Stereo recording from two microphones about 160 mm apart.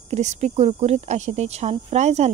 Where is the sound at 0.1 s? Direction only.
45° right (ahead or behind).